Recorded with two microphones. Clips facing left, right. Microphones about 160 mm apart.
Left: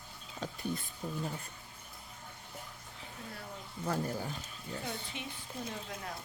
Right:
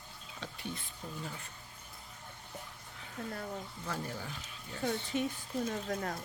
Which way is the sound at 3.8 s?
40° left (ahead or behind).